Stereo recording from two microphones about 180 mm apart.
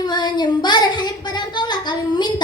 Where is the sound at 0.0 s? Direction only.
25° left (ahead or behind).